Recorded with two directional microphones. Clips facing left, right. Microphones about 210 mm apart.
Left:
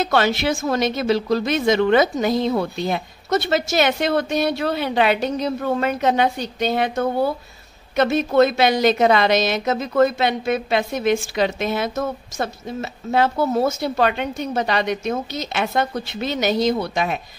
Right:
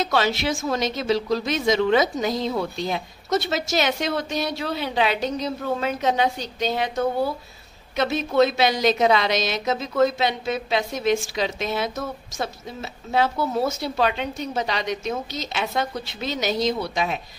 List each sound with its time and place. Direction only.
0.0 s a woman's voice: 55° left (ahead or behind)